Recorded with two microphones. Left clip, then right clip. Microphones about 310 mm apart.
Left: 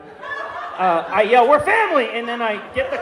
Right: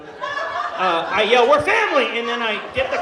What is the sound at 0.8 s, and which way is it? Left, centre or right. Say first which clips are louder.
A man's voice: left 2 dB; left.